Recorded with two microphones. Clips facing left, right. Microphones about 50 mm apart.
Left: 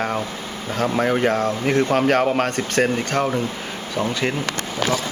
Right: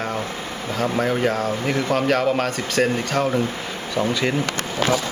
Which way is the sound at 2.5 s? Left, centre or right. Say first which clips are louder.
Left 1 dB; left.